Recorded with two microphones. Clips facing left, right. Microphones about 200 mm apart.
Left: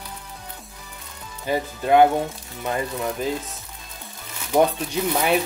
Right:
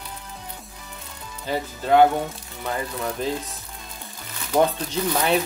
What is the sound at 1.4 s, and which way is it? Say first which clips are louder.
Speech: left 3 dB; 15° left (ahead or behind).